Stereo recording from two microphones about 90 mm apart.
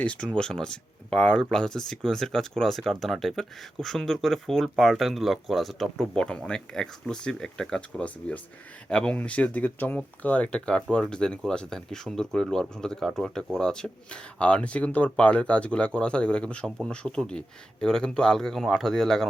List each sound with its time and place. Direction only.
0.0 s speech: 10° left (ahead or behind)